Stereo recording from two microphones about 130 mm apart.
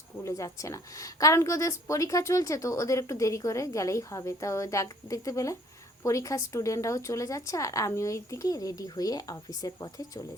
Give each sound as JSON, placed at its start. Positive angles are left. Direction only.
{"t": 0.3, "sound": "a woman's voice", "side_deg": 25}